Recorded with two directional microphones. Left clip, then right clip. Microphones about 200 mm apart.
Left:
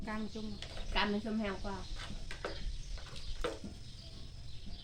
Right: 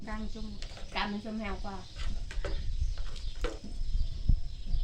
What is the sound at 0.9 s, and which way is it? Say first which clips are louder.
Speech: even; 20° right (ahead or behind).